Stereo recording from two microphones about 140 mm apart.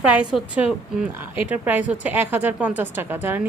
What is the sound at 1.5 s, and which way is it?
A woman's voice, 10° right (ahead or behind).